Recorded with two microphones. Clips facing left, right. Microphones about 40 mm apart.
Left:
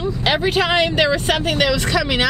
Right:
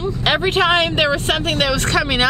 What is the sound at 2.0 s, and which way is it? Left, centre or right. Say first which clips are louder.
Speech: right 3 dB; centre.